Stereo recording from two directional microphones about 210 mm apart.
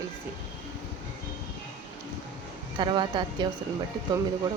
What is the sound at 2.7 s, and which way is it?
Speech, 20° right (ahead or behind).